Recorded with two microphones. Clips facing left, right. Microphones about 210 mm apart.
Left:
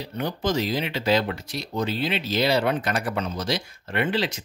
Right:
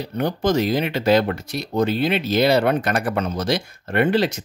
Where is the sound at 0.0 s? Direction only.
50° right (ahead or behind).